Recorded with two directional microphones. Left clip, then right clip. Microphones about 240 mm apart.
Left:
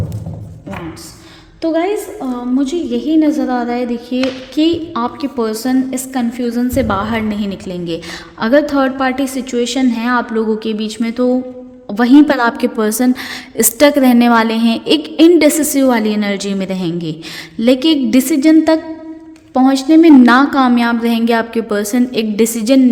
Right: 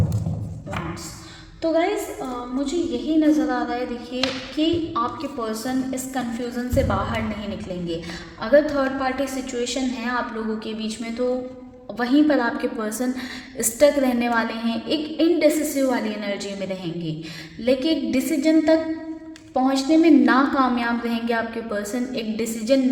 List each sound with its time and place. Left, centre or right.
1.6 s a woman's voice: left
8.4 s a woman's voice: left